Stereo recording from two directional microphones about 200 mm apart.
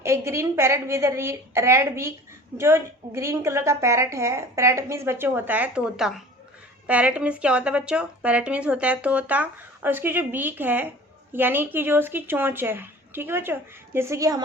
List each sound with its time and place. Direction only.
0.0 s speech: 15° right (ahead or behind)